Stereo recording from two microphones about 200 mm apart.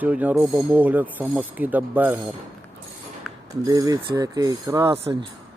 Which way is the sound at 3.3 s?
Centre (ahead or behind).